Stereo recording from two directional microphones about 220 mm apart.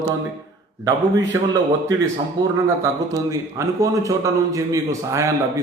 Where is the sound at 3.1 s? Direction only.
15° right (ahead or behind).